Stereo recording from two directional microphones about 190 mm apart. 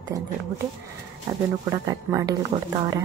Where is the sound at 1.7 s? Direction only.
15° right (ahead or behind).